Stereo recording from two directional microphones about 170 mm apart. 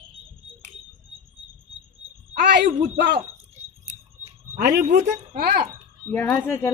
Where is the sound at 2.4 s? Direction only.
75° right (ahead or behind).